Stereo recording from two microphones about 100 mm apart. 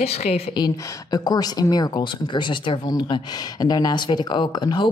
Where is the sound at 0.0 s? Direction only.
90° left.